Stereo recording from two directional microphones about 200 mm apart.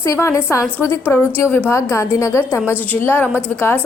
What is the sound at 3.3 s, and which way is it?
Speech, 10° right (ahead or behind).